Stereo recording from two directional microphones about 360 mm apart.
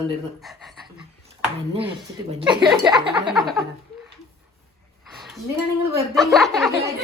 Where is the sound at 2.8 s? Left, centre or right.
Centre.